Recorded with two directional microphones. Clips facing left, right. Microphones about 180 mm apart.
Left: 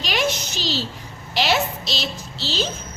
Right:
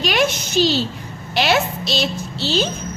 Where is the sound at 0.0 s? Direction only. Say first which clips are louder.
Right 4 dB; 55° right (ahead or behind).